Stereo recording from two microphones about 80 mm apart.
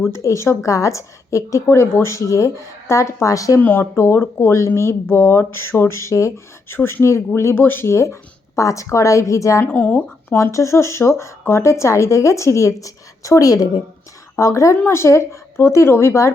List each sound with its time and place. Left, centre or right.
0.0 s a woman's voice: left
3.6 s speech: left
3.9 s a woman's voice: left
9.6 s speech: left
10.3 s a woman's voice: left